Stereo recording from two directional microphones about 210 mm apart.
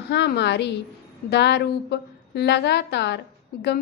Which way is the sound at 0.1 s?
55° left (ahead or behind).